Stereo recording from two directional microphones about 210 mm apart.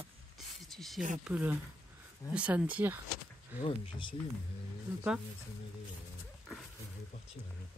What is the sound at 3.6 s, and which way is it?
Speech, 25° left (ahead or behind).